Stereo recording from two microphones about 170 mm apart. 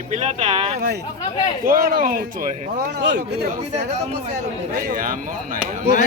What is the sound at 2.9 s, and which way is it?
Speech, 90° right.